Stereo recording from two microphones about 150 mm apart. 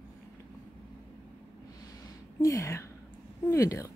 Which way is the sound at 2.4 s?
20° left (ahead or behind).